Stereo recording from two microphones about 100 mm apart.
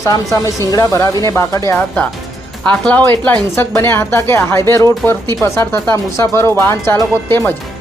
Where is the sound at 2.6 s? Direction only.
15° left (ahead or behind).